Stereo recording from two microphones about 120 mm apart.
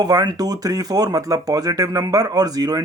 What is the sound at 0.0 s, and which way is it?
Speech, 35° right (ahead or behind).